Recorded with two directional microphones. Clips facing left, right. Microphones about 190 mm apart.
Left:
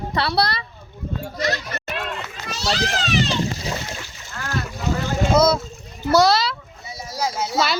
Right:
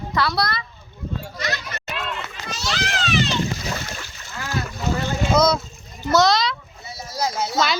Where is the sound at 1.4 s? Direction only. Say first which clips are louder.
Left 6 dB; 35° left (ahead or behind).